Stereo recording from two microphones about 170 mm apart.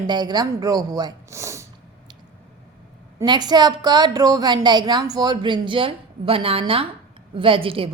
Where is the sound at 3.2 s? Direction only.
25° right (ahead or behind).